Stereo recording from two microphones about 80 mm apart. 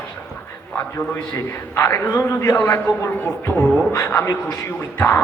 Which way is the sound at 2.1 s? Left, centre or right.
Centre.